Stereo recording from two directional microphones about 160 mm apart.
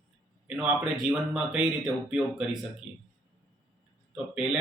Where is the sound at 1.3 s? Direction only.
5° right (ahead or behind).